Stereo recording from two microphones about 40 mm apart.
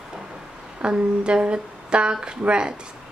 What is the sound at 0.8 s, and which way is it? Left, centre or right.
Speech, right.